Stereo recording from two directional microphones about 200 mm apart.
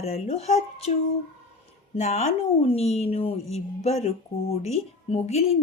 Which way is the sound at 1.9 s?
35° left (ahead or behind).